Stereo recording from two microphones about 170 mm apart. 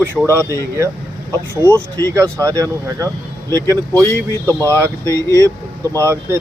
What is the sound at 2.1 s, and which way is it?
Speech, 20° right (ahead or behind).